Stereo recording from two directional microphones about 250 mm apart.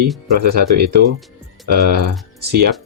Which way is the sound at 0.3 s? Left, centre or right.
Right.